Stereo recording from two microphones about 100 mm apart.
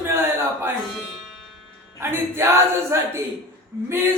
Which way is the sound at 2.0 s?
25° right (ahead or behind).